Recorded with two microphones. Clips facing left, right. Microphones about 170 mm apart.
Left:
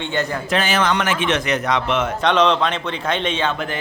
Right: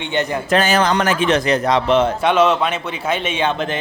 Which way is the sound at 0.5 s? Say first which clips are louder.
Right 4 dB; 40° right (ahead or behind).